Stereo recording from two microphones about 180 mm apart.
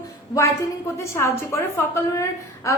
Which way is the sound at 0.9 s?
15° left (ahead or behind).